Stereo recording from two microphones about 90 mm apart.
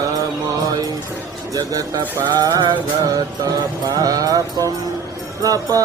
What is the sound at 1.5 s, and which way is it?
Music, 45° right (ahead or behind).